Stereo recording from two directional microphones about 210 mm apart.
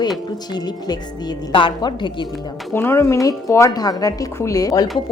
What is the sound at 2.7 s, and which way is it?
A woman's voice, 10° left (ahead or behind).